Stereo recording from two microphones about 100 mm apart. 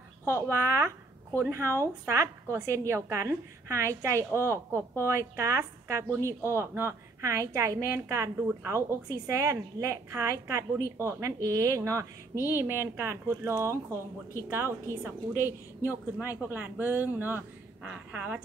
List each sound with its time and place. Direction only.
0.3 s a woman's voice: 30° right (ahead or behind)